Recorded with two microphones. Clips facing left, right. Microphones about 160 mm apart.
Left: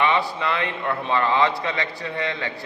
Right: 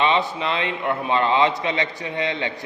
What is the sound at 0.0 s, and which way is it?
A man's voice, 20° right (ahead or behind).